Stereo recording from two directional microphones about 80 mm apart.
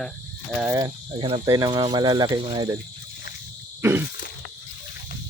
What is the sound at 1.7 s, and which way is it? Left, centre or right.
Speech, right.